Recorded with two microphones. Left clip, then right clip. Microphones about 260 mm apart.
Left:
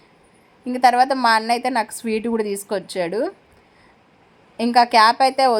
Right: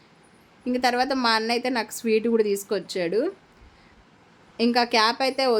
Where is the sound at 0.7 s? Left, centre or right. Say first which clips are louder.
Left 7 dB; centre.